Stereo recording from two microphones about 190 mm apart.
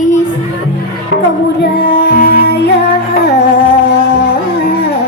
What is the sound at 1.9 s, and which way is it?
Music, 50° left (ahead or behind).